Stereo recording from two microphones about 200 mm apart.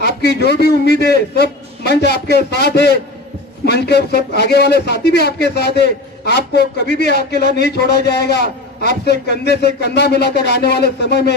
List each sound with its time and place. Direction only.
0.2 s a man's voice: 55° left (ahead or behind)